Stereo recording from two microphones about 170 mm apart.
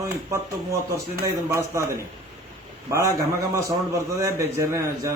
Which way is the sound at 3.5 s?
20° right (ahead or behind).